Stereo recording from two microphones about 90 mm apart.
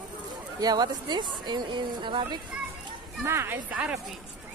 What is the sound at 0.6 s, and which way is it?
Speech, 50° right (ahead or behind).